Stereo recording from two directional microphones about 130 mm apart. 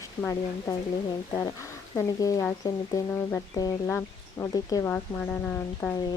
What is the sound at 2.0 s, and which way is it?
Speech, 25° left (ahead or behind).